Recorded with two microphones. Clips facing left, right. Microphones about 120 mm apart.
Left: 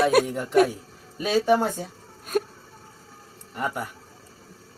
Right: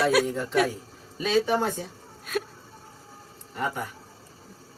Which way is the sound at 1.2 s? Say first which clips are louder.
Left 2 dB; 15° left (ahead or behind).